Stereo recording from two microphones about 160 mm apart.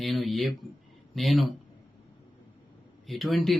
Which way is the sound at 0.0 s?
Centre (ahead or behind).